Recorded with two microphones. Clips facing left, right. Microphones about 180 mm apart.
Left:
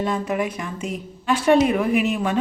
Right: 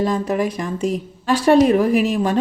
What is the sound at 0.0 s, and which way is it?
A woman's voice, 35° right (ahead or behind).